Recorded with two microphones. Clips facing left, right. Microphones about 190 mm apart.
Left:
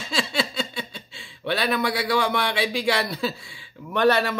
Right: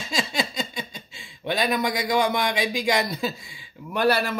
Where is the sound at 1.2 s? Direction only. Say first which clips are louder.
Even; 15° right (ahead or behind).